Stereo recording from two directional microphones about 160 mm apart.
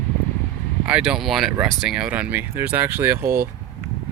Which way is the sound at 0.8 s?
5° right (ahead or behind).